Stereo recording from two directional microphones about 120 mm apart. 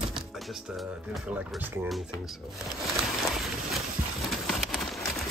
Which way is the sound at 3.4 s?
Centre (ahead or behind).